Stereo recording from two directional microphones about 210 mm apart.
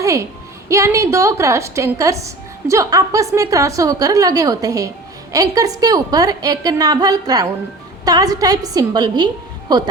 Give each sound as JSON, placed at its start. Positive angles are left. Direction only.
{"t": 0.0, "sound": "a woman's voice", "side_deg": -15}